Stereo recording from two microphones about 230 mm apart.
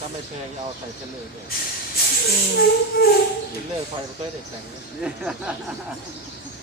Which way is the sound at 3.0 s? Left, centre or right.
Left.